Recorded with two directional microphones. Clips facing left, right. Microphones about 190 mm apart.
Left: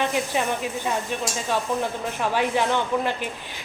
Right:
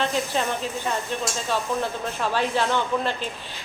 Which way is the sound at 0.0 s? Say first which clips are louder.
Left 1 dB; 10° left (ahead or behind).